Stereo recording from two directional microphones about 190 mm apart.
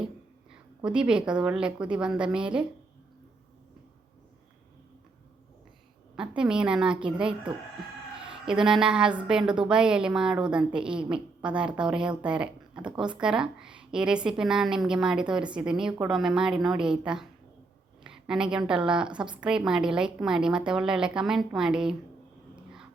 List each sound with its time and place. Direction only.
0.9 s a woman's voice: 5° right (ahead or behind)
6.1 s a woman's voice: 5° right (ahead or behind)